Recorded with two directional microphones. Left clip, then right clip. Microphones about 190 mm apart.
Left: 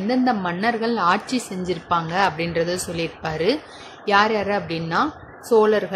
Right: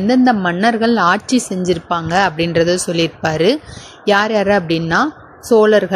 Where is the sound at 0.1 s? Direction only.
40° right (ahead or behind).